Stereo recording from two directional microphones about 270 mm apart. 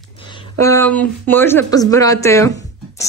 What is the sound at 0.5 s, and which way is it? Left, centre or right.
A woman's voice, centre.